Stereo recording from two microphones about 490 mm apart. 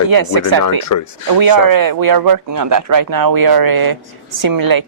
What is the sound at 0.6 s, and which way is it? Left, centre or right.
Speech, left.